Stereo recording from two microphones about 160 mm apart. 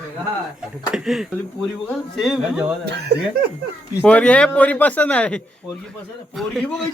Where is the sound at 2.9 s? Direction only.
90° right.